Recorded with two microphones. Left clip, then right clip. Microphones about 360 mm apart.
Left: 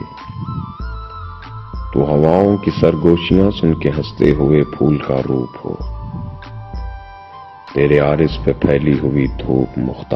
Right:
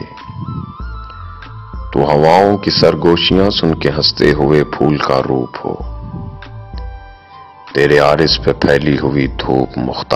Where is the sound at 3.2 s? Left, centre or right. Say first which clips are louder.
Right 4 dB; centre.